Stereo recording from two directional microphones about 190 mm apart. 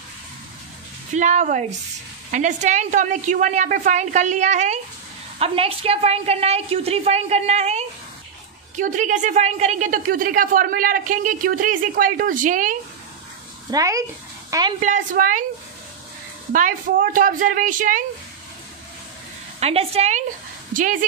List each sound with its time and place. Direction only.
1.1 s a woman's voice: 40° right (ahead or behind)
13.7 s speech: 20° right (ahead or behind)
14.8 s a woman's voice: 40° right (ahead or behind)
16.5 s a woman's voice: 45° right (ahead or behind)
19.6 s a woman's voice: 30° right (ahead or behind)